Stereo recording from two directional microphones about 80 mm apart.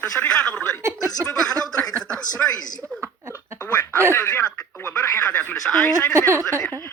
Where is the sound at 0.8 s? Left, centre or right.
Right.